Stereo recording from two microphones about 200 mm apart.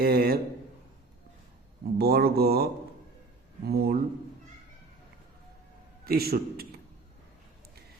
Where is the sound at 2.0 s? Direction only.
50° right (ahead or behind).